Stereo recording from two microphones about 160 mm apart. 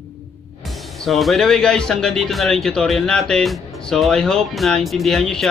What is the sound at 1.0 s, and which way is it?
Speech, centre (ahead or behind).